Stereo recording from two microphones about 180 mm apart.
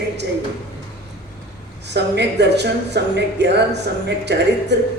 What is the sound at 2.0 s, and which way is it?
Speech, 70° right (ahead or behind).